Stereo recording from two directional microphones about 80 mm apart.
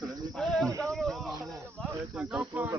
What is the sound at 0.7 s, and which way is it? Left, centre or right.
Speech, right.